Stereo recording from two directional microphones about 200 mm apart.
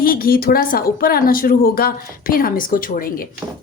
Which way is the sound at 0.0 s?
45° left (ahead or behind).